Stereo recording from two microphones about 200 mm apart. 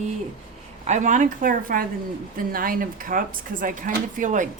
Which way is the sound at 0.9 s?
35° right (ahead or behind).